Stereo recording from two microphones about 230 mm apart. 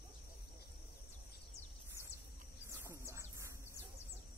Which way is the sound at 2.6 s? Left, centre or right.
Centre.